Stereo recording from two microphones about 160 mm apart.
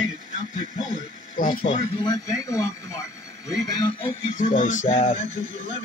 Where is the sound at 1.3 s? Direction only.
60° left (ahead or behind).